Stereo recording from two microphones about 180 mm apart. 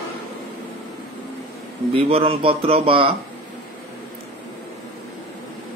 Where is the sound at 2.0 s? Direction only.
30° right (ahead or behind).